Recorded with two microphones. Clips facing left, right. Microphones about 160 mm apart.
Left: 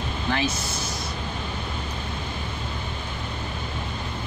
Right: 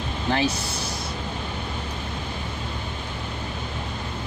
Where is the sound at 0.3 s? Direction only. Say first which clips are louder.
Right 3 dB; 30° right (ahead or behind).